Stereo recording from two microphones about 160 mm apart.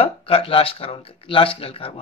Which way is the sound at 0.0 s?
35° left (ahead or behind).